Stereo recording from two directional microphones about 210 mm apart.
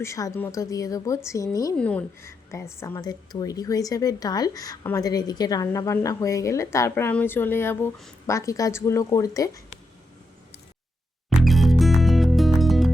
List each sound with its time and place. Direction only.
0.0 s speech: 15° left (ahead or behind)
11.3 s music: centre (ahead or behind)